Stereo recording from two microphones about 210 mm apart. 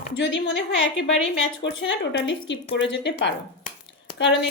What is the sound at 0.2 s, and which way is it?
A woman's voice, 60° left (ahead or behind).